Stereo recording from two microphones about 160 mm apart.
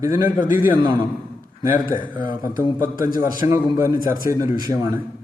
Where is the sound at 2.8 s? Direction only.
60° left (ahead or behind).